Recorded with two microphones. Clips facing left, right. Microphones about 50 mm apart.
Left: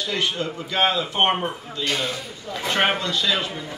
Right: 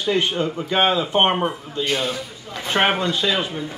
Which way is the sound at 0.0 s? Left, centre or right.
Right.